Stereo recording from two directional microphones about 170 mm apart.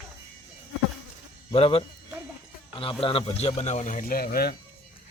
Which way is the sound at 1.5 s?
35° left (ahead or behind).